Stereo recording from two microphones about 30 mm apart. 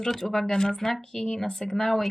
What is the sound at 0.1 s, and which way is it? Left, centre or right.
Speech, centre.